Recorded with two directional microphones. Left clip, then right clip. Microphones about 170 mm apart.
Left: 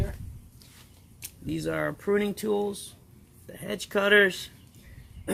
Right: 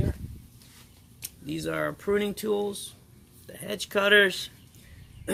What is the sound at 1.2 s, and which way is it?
Speech, 40° left (ahead or behind).